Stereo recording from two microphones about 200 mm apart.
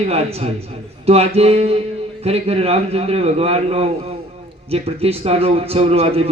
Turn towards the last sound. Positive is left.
turn(degrees=-30)  # may be behind; listen again after turning